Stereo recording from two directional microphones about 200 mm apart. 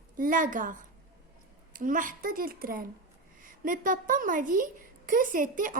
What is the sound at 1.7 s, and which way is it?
A woman's voice, 40° right (ahead or behind).